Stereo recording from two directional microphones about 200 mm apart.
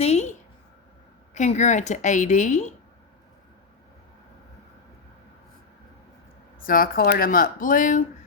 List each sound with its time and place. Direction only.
0.0 s a sound: 30° left (ahead or behind)
1.3 s speech: 35° left (ahead or behind)
6.6 s speech: 45° left (ahead or behind)